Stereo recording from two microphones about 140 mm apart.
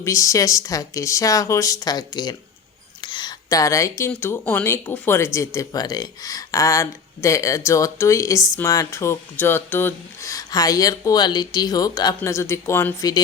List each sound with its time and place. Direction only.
0.0 s speech: 20° left (ahead or behind)
3.0 s a sound: 35° left (ahead or behind)
4.1 s speech: 15° left (ahead or behind)